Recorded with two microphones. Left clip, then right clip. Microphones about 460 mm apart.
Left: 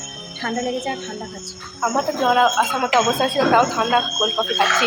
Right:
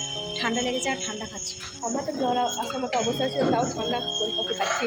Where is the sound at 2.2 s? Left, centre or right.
Right.